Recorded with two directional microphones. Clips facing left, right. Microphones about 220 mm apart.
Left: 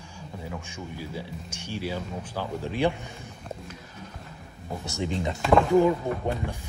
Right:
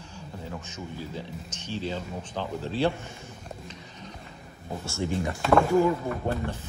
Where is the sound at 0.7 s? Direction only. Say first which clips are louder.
Even; 10° left (ahead or behind).